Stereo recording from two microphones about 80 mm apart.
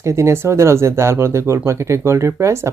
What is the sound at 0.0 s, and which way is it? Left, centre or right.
Speech, right.